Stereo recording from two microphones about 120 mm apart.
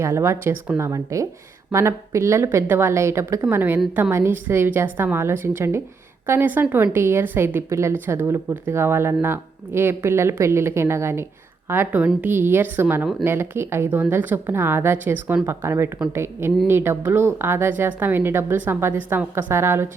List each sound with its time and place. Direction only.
0.0 s a woman's voice: 25° right (ahead or behind)